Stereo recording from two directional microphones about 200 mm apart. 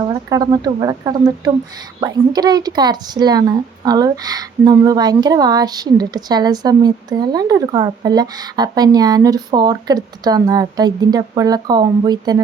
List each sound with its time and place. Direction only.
0.1 s speech: 20° right (ahead or behind)